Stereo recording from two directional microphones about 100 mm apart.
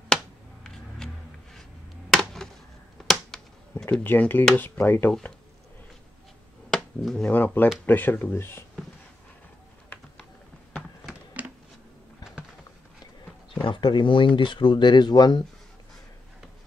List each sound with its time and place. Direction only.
0.7 s music: 5° left (ahead or behind)
2.0 s a sound: 5° left (ahead or behind)
3.0 s finger snapping: 5° left (ahead or behind)
4.0 s speech: 20° left (ahead or behind)
6.7 s finger snapping: centre (ahead or behind)
7.2 s speech: 15° left (ahead or behind)
11.4 s a sound: 15° right (ahead or behind)
13.6 s speech: 55° left (ahead or behind)